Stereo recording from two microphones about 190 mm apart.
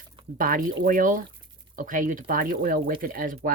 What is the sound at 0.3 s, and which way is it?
Speech, 45° right (ahead or behind).